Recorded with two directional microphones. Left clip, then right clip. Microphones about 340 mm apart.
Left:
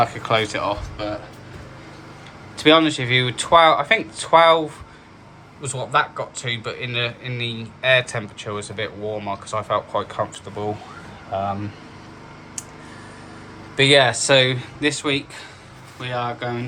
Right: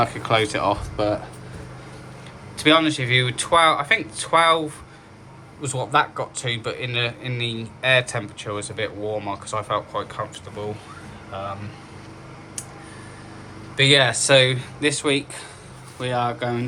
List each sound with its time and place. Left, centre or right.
0.0 s a man's voice: centre
2.6 s speech: centre
5.6 s a man's voice: centre
13.7 s a man's voice: centre